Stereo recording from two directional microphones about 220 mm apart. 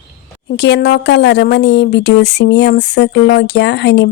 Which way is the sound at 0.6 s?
50° left (ahead or behind).